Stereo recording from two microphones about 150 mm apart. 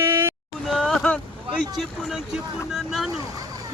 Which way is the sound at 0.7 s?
Centre (ahead or behind).